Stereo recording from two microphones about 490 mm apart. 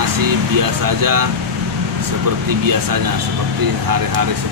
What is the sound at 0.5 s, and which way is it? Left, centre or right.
Speech, right.